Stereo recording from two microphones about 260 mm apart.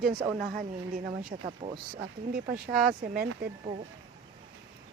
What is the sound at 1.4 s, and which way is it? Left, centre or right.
Speech, right.